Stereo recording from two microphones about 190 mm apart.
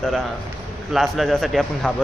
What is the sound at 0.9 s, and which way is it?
A man's voice, centre (ahead or behind).